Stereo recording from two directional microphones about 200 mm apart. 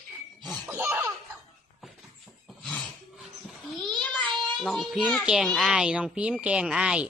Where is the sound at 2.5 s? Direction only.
Centre (ahead or behind).